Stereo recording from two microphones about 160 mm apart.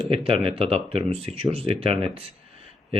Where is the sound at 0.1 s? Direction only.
35° right (ahead or behind).